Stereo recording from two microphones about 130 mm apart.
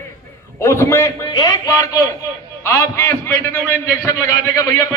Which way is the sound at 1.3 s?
30° left (ahead or behind).